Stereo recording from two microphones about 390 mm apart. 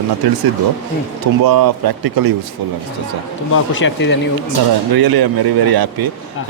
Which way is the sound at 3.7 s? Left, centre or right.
Left.